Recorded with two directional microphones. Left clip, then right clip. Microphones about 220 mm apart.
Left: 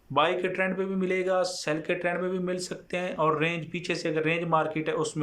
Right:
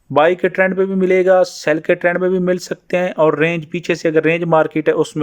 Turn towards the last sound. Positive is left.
turn(degrees=-40)  # may be behind; listen again after turning